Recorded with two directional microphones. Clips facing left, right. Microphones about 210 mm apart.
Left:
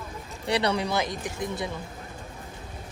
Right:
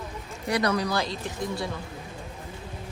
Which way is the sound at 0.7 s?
25° left (ahead or behind).